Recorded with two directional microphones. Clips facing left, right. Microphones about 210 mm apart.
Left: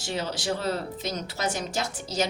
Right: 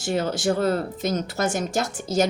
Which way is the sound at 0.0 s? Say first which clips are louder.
Right 7 dB; 50° right (ahead or behind).